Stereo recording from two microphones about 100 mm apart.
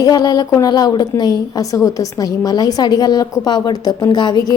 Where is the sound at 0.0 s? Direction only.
40° left (ahead or behind).